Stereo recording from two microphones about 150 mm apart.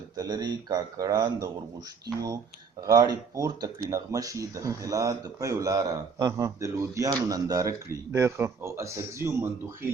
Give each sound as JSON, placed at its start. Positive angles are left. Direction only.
{"t": 0.2, "sound": "speech", "side_deg": -25}
{"t": 2.8, "sound": "speech", "side_deg": -25}